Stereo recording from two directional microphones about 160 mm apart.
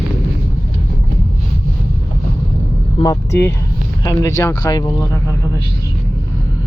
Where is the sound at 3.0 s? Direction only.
20° left (ahead or behind).